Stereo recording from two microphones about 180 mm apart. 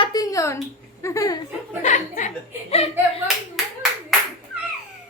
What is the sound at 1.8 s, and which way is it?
Speech, 40° left (ahead or behind).